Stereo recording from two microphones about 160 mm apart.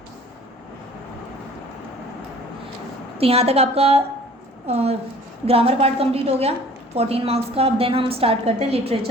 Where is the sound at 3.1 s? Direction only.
40° right (ahead or behind).